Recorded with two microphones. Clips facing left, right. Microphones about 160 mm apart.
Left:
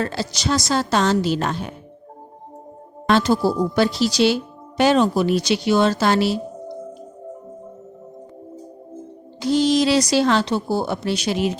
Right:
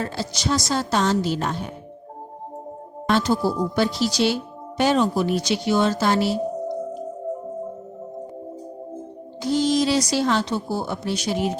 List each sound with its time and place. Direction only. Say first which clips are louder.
0.0 s a woman's voice: left 3 dB; 85° left
3.1 s a woman's voice: left 3 dB; 80° left
9.4 s a woman's voice: left 3 dB; 80° left